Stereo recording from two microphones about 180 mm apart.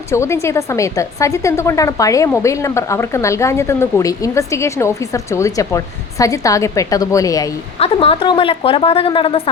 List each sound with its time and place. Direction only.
0.1 s speech: 15° left (ahead or behind)
7.8 s a woman's voice: 30° left (ahead or behind)